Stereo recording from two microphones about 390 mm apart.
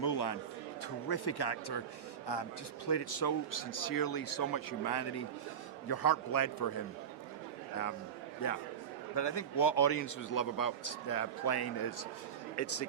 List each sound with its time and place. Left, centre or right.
0.0 s a sound: left
1.0 s a man's voice: left
2.2 s speech: left
5.9 s speech: left
8.4 s speech: left
9.1 s speech: left
12.6 s speech: left